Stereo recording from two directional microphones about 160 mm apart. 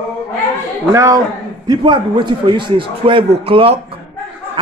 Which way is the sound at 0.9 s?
20° right (ahead or behind).